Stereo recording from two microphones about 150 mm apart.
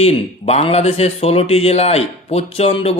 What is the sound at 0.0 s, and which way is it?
Speech, 45° left (ahead or behind).